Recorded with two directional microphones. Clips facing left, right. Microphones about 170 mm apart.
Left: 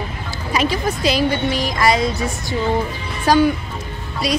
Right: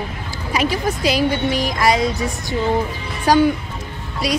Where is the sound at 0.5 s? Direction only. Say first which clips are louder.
Even; 10° right (ahead or behind).